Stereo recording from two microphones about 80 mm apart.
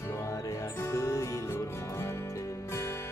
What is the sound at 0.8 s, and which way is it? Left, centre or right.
Music, left.